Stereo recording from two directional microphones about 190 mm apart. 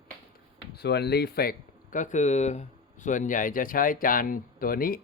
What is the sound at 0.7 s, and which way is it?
Speech, 60° left (ahead or behind).